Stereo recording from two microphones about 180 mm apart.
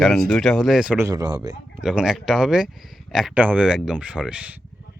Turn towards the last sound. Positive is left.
turn(degrees=-5)  # may be behind; listen again after turning